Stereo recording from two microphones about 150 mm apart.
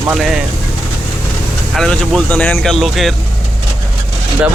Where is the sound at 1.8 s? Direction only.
5° left (ahead or behind).